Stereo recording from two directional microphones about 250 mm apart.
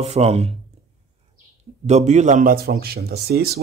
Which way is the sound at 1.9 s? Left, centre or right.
Right.